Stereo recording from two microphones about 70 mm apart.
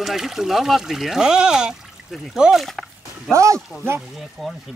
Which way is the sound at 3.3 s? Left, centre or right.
Right.